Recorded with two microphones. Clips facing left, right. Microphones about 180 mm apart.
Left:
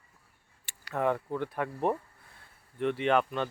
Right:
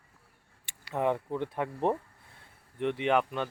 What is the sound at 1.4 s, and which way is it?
Speech, 25° right (ahead or behind).